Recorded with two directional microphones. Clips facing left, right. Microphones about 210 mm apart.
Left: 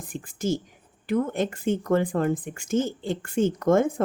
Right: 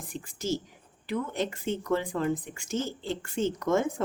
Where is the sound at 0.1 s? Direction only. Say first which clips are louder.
Left 4 dB; 50° left (ahead or behind).